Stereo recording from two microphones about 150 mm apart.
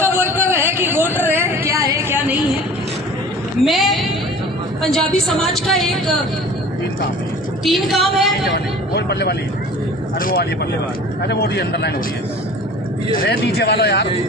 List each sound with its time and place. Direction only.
0.0 s a sound: 15° right (ahead or behind)
3.6 s a woman's voice: centre (ahead or behind)
7.6 s a woman's voice: centre (ahead or behind)
8.5 s speech: 90° left
10.2 s speech: 70° left (ahead or behind)
11.2 s a man's voice: 90° left
13.5 s a man's voice: 90° left